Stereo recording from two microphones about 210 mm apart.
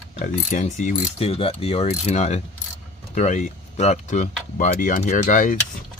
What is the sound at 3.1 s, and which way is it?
Speech, 35° left (ahead or behind).